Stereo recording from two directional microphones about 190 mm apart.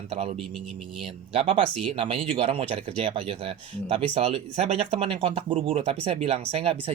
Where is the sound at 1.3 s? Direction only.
30° right (ahead or behind).